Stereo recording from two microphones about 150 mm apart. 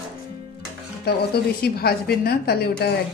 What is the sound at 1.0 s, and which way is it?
A woman's voice, 90° left.